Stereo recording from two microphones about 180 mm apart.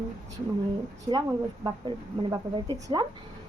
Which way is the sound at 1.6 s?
25° right (ahead or behind).